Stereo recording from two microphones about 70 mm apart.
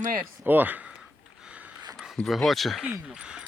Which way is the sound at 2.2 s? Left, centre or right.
Centre.